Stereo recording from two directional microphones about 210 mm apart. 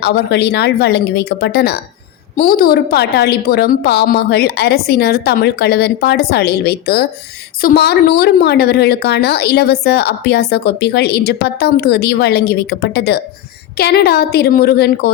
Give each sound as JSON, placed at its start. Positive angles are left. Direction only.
{"t": 0.0, "sound": "a woman's voice", "side_deg": 50}